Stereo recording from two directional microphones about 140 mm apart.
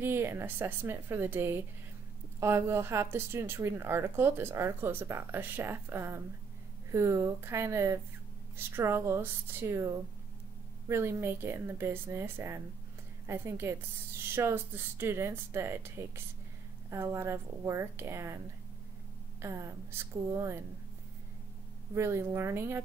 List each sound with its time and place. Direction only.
0.0 s a woman's voice: 15° right (ahead or behind)
19.4 s a woman's voice: 20° right (ahead or behind)
21.9 s speech: 20° right (ahead or behind)